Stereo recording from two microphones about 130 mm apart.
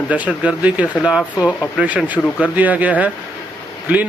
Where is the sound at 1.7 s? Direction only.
10° right (ahead or behind).